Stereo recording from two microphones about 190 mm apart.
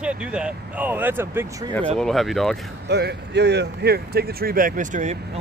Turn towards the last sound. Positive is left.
turn(degrees=-40)  # may be behind; listen again after turning